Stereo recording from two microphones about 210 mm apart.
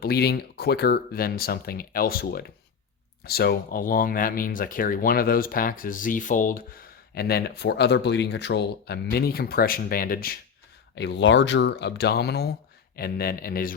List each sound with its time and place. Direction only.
0.0 s speech: 50° left (ahead or behind)
10.9 s speech: 55° left (ahead or behind)